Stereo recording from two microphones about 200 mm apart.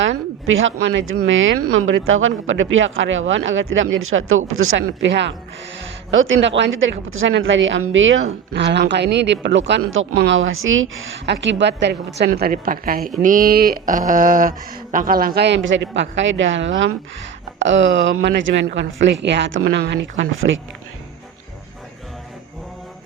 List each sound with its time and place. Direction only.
0.0 s a woman's voice: 70° right (ahead or behind)
12.2 s a woman's voice: 50° right (ahead or behind)
15.4 s a woman's voice: 60° right (ahead or behind)